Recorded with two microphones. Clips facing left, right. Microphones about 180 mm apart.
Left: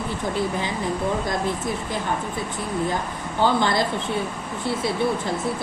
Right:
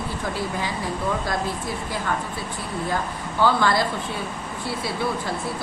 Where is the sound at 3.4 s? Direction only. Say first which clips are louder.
Even; 20° left (ahead or behind).